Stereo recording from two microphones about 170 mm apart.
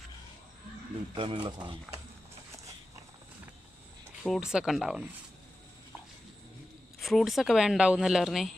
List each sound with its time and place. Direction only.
1.1 s speech: 30° right (ahead or behind)
4.2 s a woman's voice: centre (ahead or behind)
7.0 s a woman's voice: centre (ahead or behind)